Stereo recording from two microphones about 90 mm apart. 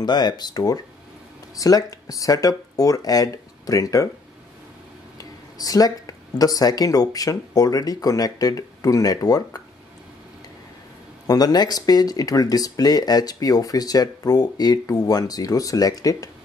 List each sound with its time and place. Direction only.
0.0 s speech: 55° left (ahead or behind)
5.1 s speech: 45° left (ahead or behind)
11.2 s speech: 45° left (ahead or behind)